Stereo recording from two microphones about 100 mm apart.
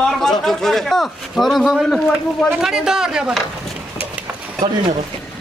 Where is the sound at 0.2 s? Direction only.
5° left (ahead or behind).